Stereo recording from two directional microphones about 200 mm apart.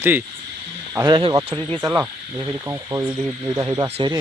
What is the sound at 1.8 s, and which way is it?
Speech, 15° right (ahead or behind).